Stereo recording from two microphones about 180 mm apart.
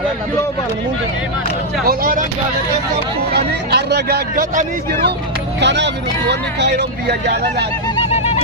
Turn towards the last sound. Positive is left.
turn(degrees=-65)  # may be behind; listen again after turning